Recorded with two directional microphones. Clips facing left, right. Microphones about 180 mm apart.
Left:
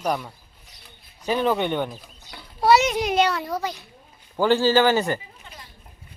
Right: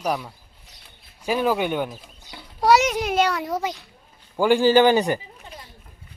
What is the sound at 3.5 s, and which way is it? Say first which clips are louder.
A child's voice: right 2 dB; 20° right (ahead or behind).